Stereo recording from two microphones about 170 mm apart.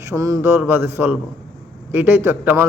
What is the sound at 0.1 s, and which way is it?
Mantra, 20° right (ahead or behind).